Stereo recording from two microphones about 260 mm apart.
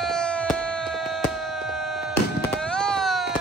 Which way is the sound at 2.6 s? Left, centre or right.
Centre.